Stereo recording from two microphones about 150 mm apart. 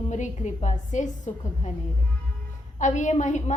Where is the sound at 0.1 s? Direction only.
50° left (ahead or behind).